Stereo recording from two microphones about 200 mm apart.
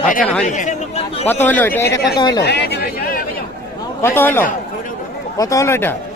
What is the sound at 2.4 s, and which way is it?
Chatter, 55° left (ahead or behind).